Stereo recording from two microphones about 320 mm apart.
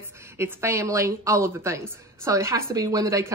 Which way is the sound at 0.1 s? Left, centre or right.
Centre.